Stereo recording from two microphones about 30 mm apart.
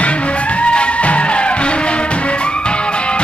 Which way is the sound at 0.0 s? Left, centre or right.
Left.